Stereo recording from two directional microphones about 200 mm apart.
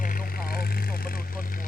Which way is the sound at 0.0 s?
45° left (ahead or behind).